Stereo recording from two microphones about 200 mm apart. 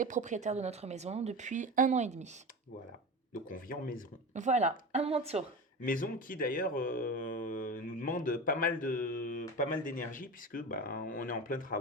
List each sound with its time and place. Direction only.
0.0 s speech: 40° right (ahead or behind)
3.3 s speech: 45° left (ahead or behind)
4.4 s speech: 35° right (ahead or behind)
5.8 s speech: 45° left (ahead or behind)